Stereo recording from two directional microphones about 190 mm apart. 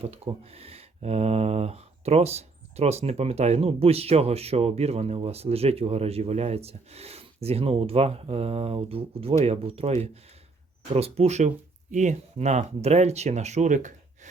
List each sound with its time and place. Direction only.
0.0 s speech: 30° right (ahead or behind)